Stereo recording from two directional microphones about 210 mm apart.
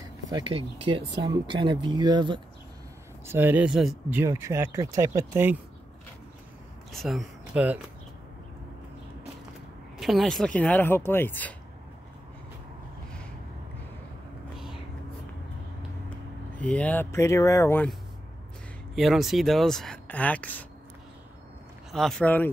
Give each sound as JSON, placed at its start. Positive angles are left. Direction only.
{"t": 0.3, "sound": "speech", "side_deg": -25}
{"t": 3.3, "sound": "speech", "side_deg": -10}
{"t": 6.9, "sound": "speech", "side_deg": 0}
{"t": 9.9, "sound": "speech", "side_deg": 0}
{"t": 16.5, "sound": "speech", "side_deg": 5}
{"t": 18.9, "sound": "speech", "side_deg": 0}
{"t": 21.9, "sound": "speech", "side_deg": 0}